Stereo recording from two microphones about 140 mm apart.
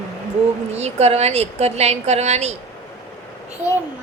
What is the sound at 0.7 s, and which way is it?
A woman's voice, 50° right (ahead or behind).